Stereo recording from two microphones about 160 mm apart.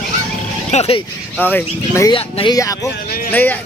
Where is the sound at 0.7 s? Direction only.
40° left (ahead or behind).